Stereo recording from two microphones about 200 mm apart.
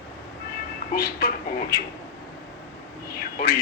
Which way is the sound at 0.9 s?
45° left (ahead or behind).